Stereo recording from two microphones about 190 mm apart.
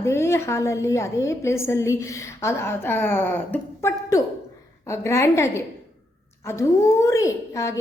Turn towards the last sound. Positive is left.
turn(degrees=15)  # may be behind; listen again after turning